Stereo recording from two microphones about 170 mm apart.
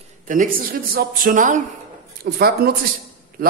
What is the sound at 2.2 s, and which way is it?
Speech, 65° right (ahead or behind).